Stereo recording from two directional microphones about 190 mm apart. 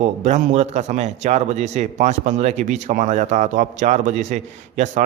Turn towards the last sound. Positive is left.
turn(degrees=-40)  # may be behind; listen again after turning